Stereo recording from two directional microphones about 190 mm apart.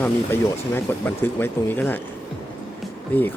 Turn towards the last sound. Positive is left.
turn(degrees=10)  # may be behind; listen again after turning